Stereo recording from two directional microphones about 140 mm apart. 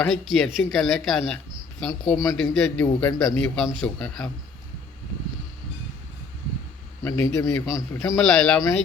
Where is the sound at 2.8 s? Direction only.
20° left (ahead or behind).